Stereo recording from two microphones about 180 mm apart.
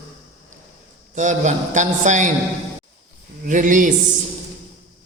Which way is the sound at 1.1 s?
45° right (ahead or behind).